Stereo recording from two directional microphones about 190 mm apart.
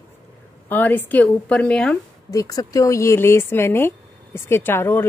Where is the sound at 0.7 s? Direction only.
10° left (ahead or behind).